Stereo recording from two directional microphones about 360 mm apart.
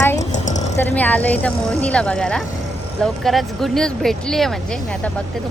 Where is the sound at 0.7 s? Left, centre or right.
Centre.